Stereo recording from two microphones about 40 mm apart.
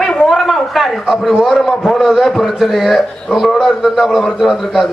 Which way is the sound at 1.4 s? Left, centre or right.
Centre.